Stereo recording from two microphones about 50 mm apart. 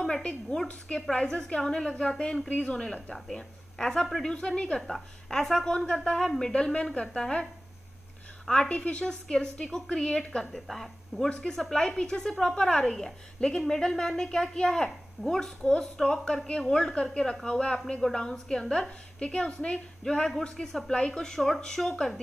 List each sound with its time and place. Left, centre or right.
0.2 s a woman's voice: left
8.5 s a woman's voice: centre
9.0 s a woman's voice: centre
20.9 s a woman's voice: centre